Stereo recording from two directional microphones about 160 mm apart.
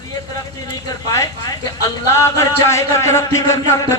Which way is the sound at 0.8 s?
20° left (ahead or behind).